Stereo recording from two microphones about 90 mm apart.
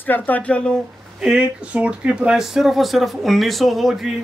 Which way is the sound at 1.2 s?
10° right (ahead or behind).